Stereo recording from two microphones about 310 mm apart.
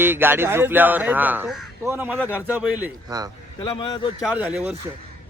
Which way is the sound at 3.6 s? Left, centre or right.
Centre.